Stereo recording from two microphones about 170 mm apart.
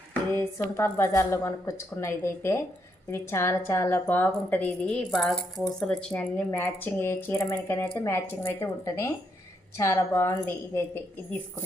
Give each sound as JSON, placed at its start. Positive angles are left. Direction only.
{"t": 0.1, "sound": "a woman's voice", "side_deg": 15}